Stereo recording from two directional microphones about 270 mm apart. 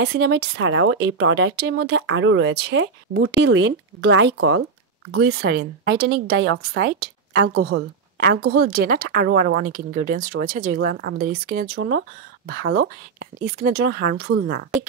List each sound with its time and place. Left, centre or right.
0.0 s a woman's voice: right